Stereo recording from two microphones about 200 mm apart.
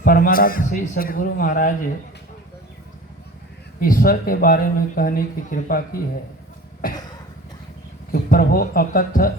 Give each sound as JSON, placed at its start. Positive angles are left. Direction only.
{"t": 0.0, "sound": "speech", "side_deg": 45}
{"t": 3.8, "sound": "speech", "side_deg": 45}
{"t": 8.1, "sound": "speech", "side_deg": 45}